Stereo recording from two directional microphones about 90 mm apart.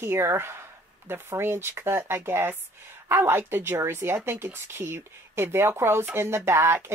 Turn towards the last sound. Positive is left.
turn(degrees=-30)  # may be behind; listen again after turning